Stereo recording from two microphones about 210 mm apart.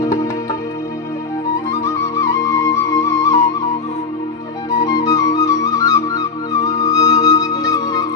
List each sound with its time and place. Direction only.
0.0 s music: 15° left (ahead or behind)
1.8 s flute: 15° left (ahead or behind)
4.8 s music: 15° left (ahead or behind)